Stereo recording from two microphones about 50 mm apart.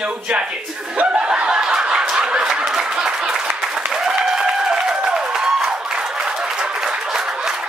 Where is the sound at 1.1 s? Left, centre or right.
Centre.